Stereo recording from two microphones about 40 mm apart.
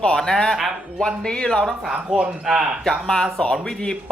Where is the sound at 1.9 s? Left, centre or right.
Right.